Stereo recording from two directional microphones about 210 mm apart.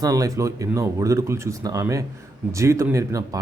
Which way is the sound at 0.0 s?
15° right (ahead or behind).